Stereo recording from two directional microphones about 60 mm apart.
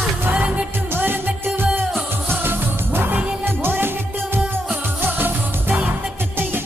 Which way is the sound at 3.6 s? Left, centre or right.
Right.